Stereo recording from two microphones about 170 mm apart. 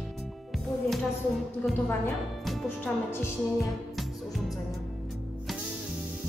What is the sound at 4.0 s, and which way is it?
Music, centre (ahead or behind).